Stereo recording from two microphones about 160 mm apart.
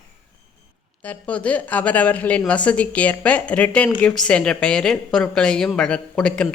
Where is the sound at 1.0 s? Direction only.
10° left (ahead or behind).